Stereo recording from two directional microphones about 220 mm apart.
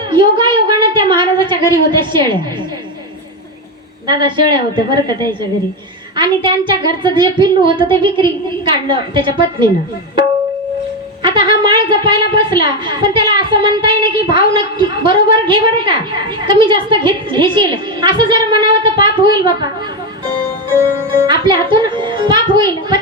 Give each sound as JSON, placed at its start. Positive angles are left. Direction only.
{"t": 0.1, "sound": "a sound", "side_deg": -20}
{"t": 1.9, "sound": "a woman's voice", "side_deg": -20}
{"t": 4.0, "sound": "a woman's voice", "side_deg": -20}
{"t": 11.2, "sound": "a woman's voice", "side_deg": -20}
{"t": 21.2, "sound": "a woman's voice", "side_deg": -20}